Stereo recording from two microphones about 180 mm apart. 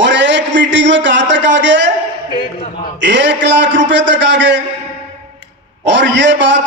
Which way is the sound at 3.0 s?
75° right (ahead or behind).